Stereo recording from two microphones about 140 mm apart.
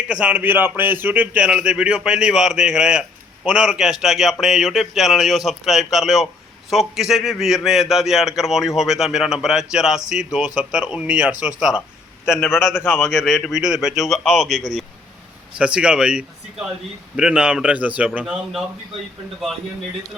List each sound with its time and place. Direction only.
0.1 s a man's voice: 10° right (ahead or behind)
12.4 s a man's voice: 15° left (ahead or behind)
13.1 s a man's voice: 5° right (ahead or behind)